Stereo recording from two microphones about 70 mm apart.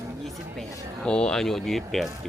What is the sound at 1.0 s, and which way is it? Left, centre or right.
Speech, centre.